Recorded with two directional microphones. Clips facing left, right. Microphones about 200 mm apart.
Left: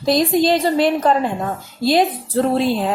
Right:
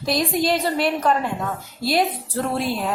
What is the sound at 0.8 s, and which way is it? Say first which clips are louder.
Speech: left 4 dB; 25° left (ahead or behind).